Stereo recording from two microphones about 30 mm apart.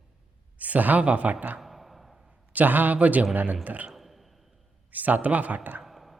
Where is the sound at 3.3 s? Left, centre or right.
Right.